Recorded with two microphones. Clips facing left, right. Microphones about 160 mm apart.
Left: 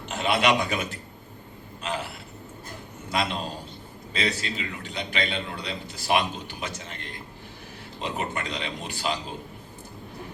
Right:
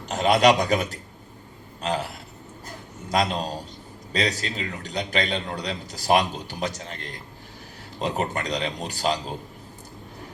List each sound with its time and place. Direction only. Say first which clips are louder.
0.1 s a man's voice: right 5 dB; 40° right (ahead or behind)